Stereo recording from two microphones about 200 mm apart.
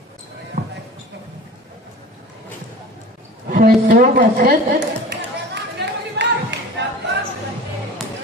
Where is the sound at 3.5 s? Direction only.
50° right (ahead or behind).